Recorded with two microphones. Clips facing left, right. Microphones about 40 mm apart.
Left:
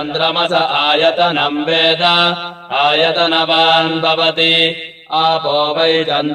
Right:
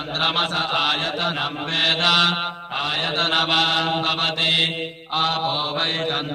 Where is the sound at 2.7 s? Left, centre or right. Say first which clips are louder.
Left 12 dB; left.